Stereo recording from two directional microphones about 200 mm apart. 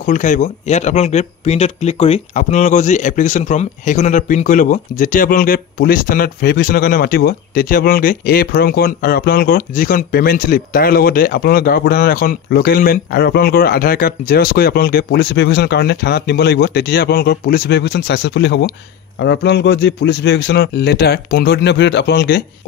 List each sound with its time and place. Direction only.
0.0 s a man's voice: 40° left (ahead or behind)